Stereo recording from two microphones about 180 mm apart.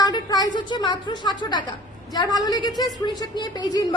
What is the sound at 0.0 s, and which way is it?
A woman's voice, 20° left (ahead or behind).